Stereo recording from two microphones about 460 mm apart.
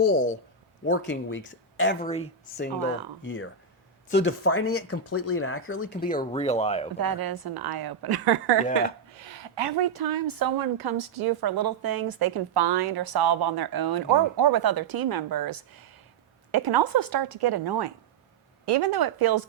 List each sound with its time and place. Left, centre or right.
0.0 s speech: centre
2.0 s speech: centre
3.2 s speech: left
7.0 s a woman's voice: right
9.1 s a woman's voice: right